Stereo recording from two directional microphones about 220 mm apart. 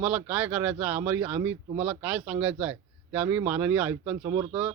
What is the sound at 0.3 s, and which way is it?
A man's voice, 5° right (ahead or behind).